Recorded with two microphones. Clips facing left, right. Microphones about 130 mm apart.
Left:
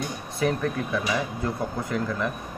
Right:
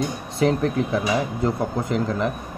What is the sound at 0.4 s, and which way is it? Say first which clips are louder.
Speech: right 5 dB; 25° right (ahead or behind).